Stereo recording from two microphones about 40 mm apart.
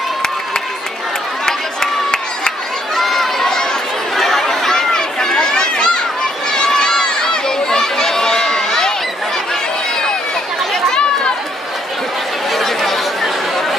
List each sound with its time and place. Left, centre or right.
3.0 s chatter: centre
6.5 s crowd: centre
10.7 s chatter: centre
12.4 s chatter: centre